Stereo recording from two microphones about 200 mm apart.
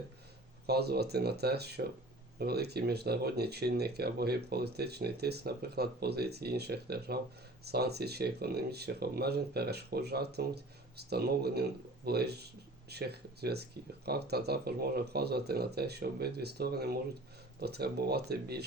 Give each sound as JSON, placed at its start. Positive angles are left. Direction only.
{"t": 0.7, "sound": "speech", "side_deg": -55}